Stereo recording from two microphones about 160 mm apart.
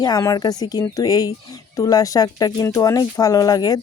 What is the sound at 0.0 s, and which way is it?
Speech, 20° left (ahead or behind).